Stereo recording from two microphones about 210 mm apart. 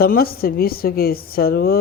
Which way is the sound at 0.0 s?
45° left (ahead or behind).